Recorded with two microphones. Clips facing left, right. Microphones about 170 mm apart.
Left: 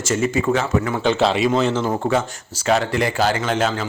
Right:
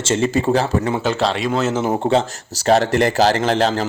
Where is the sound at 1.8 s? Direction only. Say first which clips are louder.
Right 3 dB; 25° right (ahead or behind).